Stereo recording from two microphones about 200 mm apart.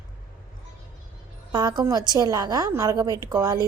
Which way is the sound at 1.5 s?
20° right (ahead or behind).